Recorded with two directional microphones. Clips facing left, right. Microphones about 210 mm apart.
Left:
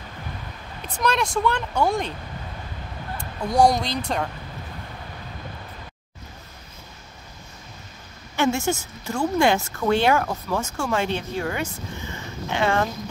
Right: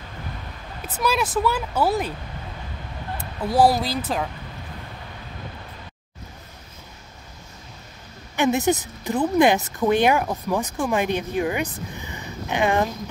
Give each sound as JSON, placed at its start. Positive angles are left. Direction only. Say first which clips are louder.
{"t": 0.8, "sound": "speech", "louder": "even", "side_deg": -5}
{"t": 3.2, "sound": "speech", "louder": "even", "side_deg": -5}
{"t": 8.4, "sound": "speech", "louder": "right 2 dB", "side_deg": -20}